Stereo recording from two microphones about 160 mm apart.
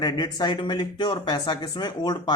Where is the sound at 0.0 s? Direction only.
30° left (ahead or behind).